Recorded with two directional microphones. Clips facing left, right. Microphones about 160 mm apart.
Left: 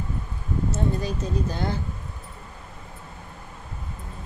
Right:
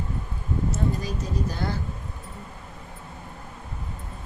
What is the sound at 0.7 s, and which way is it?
Speech, 25° left (ahead or behind).